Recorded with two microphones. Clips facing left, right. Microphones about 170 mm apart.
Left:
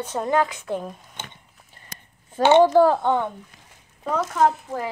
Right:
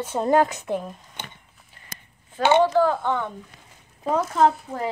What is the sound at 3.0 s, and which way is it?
Speech, 25° left (ahead or behind).